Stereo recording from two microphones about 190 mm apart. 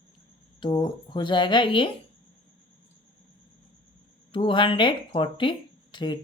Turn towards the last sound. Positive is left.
turn(degrees=25)  # may be behind; listen again after turning